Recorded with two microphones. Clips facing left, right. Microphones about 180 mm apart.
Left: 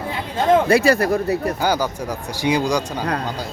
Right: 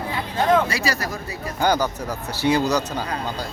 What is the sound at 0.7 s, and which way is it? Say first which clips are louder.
Speech: left 11 dB; 55° left (ahead or behind).